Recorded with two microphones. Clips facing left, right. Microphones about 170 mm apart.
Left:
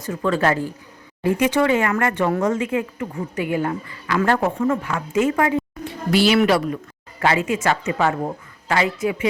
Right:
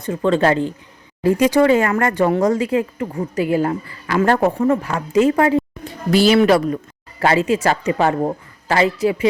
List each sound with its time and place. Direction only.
0.1 s speech: 25° right (ahead or behind)
1.2 s speech: 35° right (ahead or behind)